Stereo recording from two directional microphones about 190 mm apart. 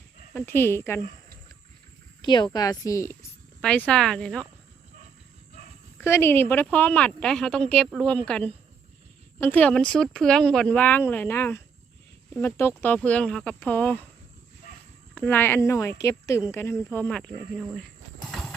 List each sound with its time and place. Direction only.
0.3 s speech: 10° left (ahead or behind)
2.2 s speech: 25° left (ahead or behind)
3.6 s speech: 5° left (ahead or behind)
6.0 s speech: 10° left (ahead or behind)
15.1 s speech: 10° left (ahead or behind)